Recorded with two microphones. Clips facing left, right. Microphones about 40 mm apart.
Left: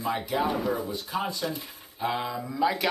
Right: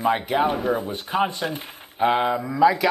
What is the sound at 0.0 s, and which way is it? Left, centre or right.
Speech, right.